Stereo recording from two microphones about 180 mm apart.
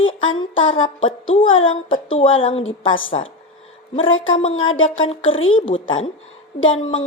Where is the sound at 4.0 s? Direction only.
90° left.